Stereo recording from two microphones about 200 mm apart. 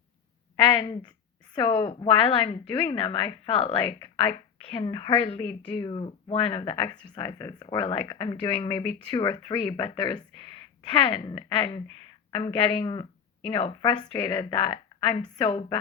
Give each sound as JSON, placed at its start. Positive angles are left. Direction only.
{"t": 0.7, "sound": "speech", "side_deg": 25}